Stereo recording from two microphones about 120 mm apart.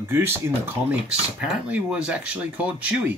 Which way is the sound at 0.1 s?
20° right (ahead or behind).